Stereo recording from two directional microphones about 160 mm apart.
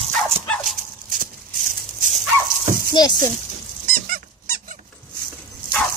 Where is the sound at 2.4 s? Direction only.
60° right (ahead or behind).